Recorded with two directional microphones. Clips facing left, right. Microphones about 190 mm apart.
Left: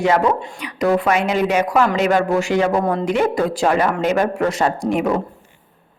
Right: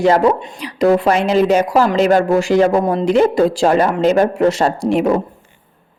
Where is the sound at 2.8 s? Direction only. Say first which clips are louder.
Right 3 dB; 20° right (ahead or behind).